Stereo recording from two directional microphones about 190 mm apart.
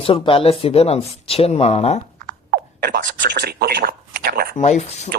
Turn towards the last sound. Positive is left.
turn(degrees=35)  # may be behind; listen again after turning